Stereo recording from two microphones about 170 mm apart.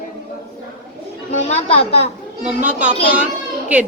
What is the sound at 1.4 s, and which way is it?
Speech, 35° left (ahead or behind).